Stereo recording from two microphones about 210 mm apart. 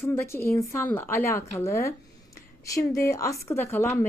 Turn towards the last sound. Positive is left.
turn(degrees=10)  # may be behind; listen again after turning